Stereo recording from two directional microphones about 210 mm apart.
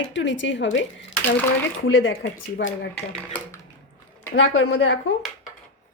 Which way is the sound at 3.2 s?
5° left (ahead or behind).